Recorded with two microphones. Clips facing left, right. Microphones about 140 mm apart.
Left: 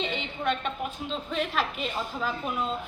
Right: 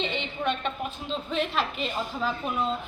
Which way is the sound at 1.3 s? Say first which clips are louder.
Right 1 dB; 5° left (ahead or behind).